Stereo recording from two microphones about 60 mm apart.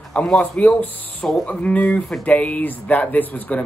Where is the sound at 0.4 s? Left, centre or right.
Left.